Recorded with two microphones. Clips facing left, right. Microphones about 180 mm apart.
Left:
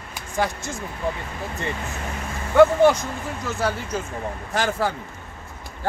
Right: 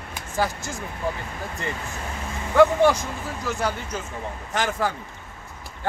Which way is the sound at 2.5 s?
Centre (ahead or behind).